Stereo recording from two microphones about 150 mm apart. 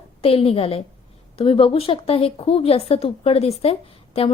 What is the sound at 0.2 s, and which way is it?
A woman's voice, 40° left (ahead or behind).